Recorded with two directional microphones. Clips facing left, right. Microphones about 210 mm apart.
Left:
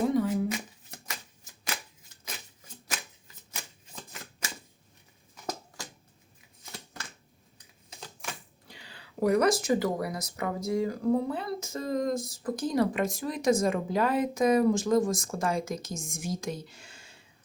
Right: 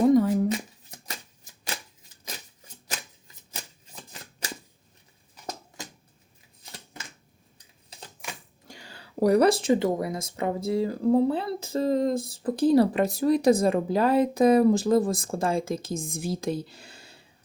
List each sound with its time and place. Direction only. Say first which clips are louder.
0.1 s shuffling cards: right 6 dB; 45° right (ahead or behind)
4.1 s shuffling cards: right 4 dB; 35° right (ahead or behind)
8.6 s speech: right 4 dB; 45° right (ahead or behind)